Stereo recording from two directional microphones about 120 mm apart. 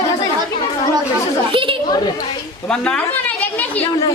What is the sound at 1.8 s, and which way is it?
Speech, 35° left (ahead or behind).